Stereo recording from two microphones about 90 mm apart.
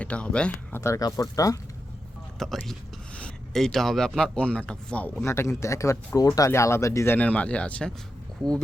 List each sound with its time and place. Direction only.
0.0 s speech: 15° left (ahead or behind)
0.7 s speech: 35° left (ahead or behind)
2.4 s speech: 5° left (ahead or behind)
5.2 s speech: 30° left (ahead or behind)
6.5 s speech: 30° left (ahead or behind); by 7.9 s 10° left (ahead or behind)